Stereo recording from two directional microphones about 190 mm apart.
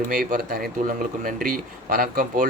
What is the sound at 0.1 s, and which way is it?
A man's voice, 50° right (ahead or behind).